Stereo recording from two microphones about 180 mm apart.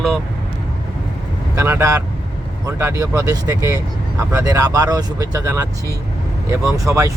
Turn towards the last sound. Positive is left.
turn(degrees=-15)  # may be behind; listen again after turning